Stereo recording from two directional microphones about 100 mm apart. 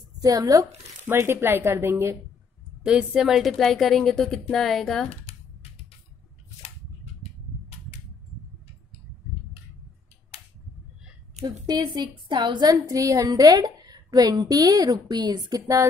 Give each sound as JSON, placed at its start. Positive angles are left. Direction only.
{"t": 0.2, "sound": "a woman's voice", "side_deg": -35}
{"t": 1.0, "sound": "speech", "side_deg": -25}
{"t": 2.8, "sound": "a woman's voice", "side_deg": -10}
{"t": 5.1, "sound": "computer keyboard", "side_deg": 90}
{"t": 11.6, "sound": "a woman's voice", "side_deg": -45}
{"t": 12.8, "sound": "a woman's voice", "side_deg": -35}